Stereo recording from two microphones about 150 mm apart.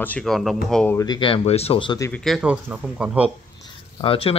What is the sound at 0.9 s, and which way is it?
Speech, 25° left (ahead or behind).